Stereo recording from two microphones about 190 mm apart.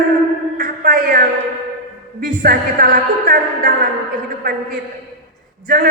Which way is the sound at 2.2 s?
50° right (ahead or behind).